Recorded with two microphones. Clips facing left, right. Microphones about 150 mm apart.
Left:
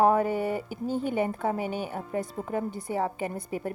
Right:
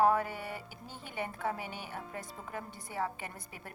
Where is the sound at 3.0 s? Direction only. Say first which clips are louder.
Left 6 dB; 30° left (ahead or behind).